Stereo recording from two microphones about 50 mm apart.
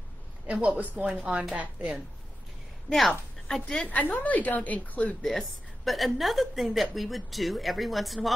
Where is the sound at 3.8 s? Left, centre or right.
Left.